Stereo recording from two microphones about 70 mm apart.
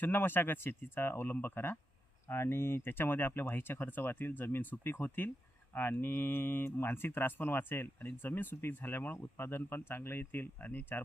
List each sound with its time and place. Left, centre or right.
0.0 s speech: left